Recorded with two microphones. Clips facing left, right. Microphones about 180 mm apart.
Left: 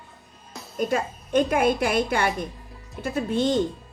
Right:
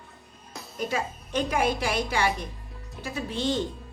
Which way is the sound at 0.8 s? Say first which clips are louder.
Left 5 dB; 55° left (ahead or behind).